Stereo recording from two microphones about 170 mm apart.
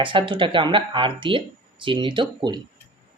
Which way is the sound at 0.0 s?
30° right (ahead or behind).